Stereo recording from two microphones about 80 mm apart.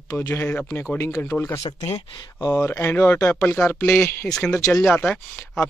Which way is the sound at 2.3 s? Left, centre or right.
Left.